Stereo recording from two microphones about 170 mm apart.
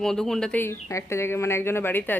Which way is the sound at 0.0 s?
5° left (ahead or behind).